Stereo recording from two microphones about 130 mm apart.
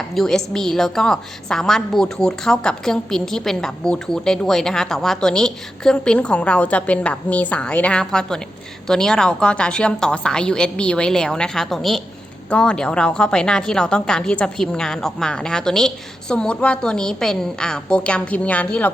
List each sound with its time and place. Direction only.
0.1 s a woman's voice: 5° left (ahead or behind)